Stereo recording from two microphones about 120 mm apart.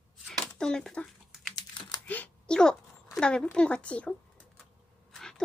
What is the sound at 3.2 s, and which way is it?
Speech, 5° left (ahead or behind).